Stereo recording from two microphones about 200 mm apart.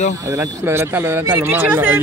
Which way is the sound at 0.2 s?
15° right (ahead or behind).